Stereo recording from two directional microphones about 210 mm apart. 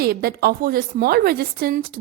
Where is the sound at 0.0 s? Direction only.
45° right (ahead or behind).